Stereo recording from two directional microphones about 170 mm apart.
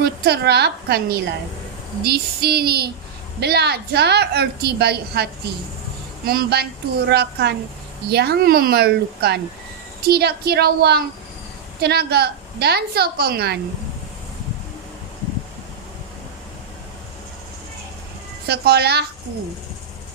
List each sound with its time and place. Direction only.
0.0 s a woman's voice: 70° right (ahead or behind)
18.5 s a woman's voice: 70° right (ahead or behind)